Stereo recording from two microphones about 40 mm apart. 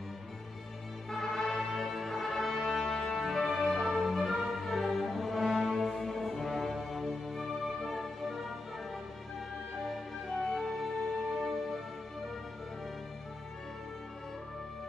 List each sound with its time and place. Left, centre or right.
1.1 s music: centre
10.4 s music: centre